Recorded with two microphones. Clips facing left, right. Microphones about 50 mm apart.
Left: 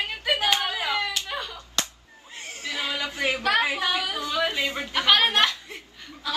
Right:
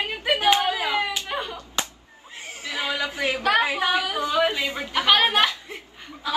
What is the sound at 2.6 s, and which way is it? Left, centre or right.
A woman's voice, centre.